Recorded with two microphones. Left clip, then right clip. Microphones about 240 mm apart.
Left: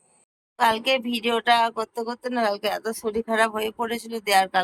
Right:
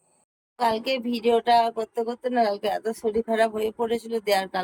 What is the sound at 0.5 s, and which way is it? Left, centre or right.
Speech, centre.